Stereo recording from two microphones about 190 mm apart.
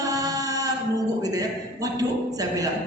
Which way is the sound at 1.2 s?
20° right (ahead or behind).